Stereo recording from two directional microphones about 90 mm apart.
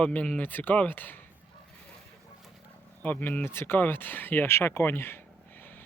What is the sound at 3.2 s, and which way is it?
Speech, 20° left (ahead or behind).